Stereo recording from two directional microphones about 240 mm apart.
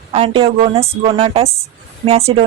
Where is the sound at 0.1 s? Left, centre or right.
Right.